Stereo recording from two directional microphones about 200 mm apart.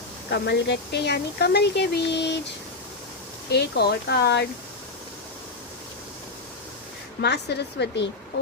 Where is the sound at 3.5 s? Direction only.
55° left (ahead or behind).